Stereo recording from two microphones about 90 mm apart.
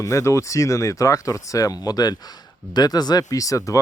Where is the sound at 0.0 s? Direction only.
35° left (ahead or behind).